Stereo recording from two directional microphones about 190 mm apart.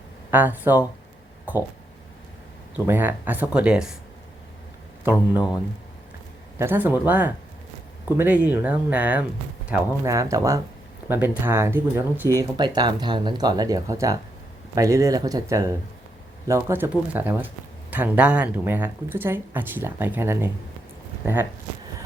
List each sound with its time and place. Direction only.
0.3 s speech: 10° right (ahead or behind)
2.7 s speech: 10° right (ahead or behind)
5.0 s speech: 10° right (ahead or behind)
6.6 s speech: 10° right (ahead or behind)